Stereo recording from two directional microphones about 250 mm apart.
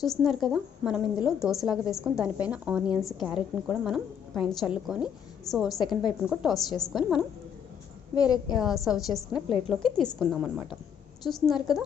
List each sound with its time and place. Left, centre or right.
0.2 s a woman's voice: centre
5.8 s a woman's voice: centre
6.2 s a woman's voice: centre
8.1 s a woman's voice: centre
8.5 s a woman's voice: centre